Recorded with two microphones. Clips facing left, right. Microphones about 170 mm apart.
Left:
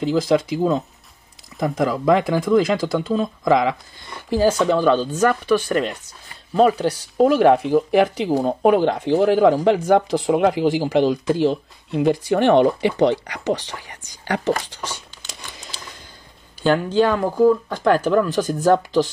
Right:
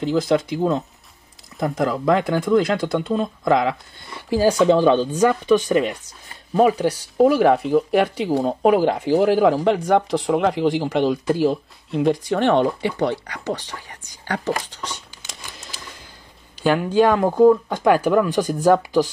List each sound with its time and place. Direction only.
0.0 s speech: centre (ahead or behind)
4.3 s speech: 15° right (ahead or behind); by 13.6 s 20° left (ahead or behind)
16.6 s speech: 10° right (ahead or behind)